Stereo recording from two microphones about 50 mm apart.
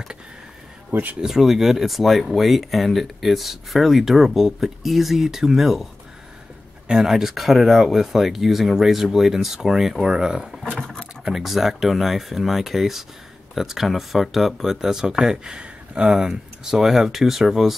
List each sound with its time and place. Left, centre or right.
1.2 s speech: centre
6.9 s speech: centre
11.2 s speech: centre; by 16.1 s right
16.1 s speech: centre